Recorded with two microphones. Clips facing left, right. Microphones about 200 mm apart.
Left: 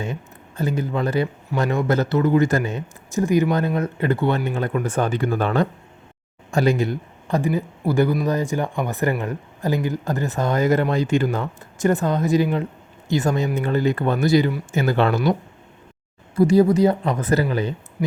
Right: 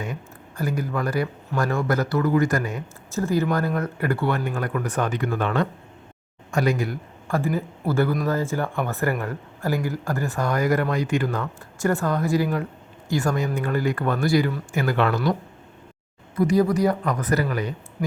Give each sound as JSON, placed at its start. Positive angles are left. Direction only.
{"t": 0.0, "sound": "a man's voice", "side_deg": 25}